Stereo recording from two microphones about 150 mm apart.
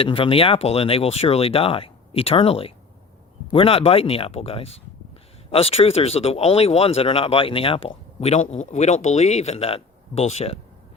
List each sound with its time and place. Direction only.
0.0 s speech: 40° left (ahead or behind)